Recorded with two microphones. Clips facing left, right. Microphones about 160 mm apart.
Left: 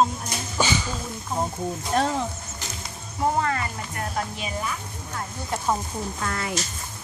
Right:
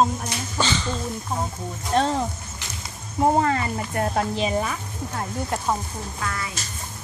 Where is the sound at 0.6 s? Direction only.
10° left (ahead or behind).